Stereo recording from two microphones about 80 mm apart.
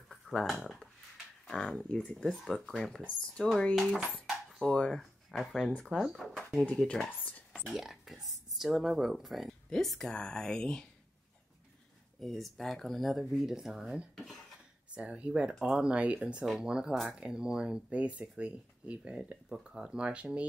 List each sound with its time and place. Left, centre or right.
0.1 s a sound: centre
1.5 s speech: centre
3.7 s speech: centre
6.7 s speech: centre
7.1 s speech: left
7.5 s speech: centre
12.2 s speech: centre
14.1 s dishes: centre
15.0 s speech: centre